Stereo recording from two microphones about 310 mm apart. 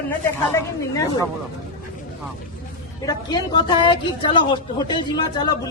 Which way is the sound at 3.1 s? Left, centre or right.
Centre.